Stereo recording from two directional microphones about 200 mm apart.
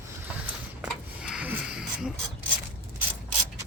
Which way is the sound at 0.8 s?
5° right (ahead or behind).